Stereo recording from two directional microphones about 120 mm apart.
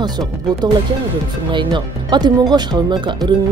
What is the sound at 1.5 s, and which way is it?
Speech, 40° right (ahead or behind).